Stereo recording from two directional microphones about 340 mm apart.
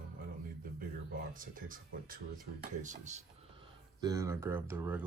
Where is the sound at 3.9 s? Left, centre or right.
Centre.